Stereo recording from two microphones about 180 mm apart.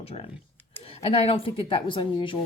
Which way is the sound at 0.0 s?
35° left (ahead or behind).